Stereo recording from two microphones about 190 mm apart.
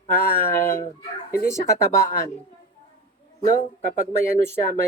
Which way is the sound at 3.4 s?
45° left (ahead or behind).